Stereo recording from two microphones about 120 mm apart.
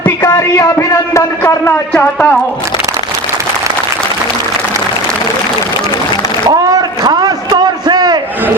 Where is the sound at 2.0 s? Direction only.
10° left (ahead or behind).